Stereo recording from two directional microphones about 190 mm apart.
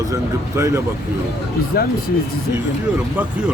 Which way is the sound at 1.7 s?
55° left (ahead or behind).